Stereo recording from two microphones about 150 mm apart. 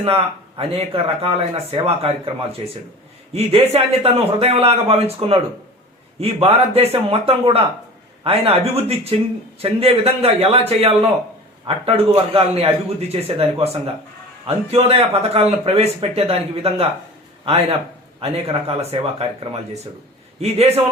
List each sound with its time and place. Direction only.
0.0 s a man's voice: 40° right (ahead or behind)
3.3 s a man's voice: 45° right (ahead or behind)
20.4 s speech: 45° right (ahead or behind)